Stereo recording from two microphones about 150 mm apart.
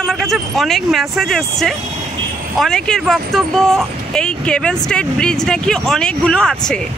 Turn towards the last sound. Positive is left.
turn(degrees=5)  # may be behind; listen again after turning